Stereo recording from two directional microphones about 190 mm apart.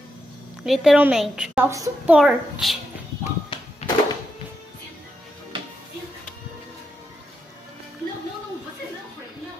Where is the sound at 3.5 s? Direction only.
25° left (ahead or behind).